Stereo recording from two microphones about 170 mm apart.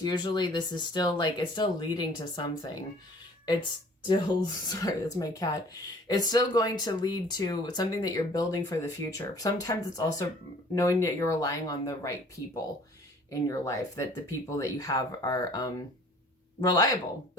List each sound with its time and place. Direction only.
0.0 s speech: 25° left (ahead or behind)
4.0 s speech: 25° left (ahead or behind)
13.3 s speech: 20° left (ahead or behind)